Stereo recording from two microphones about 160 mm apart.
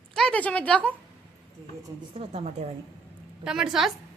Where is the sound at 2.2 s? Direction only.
40° right (ahead or behind).